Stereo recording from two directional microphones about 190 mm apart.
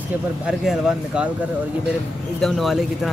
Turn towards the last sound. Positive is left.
turn(degrees=0)  # may be behind; listen again after turning